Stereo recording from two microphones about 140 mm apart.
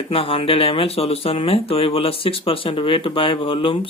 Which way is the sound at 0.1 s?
40° left (ahead or behind).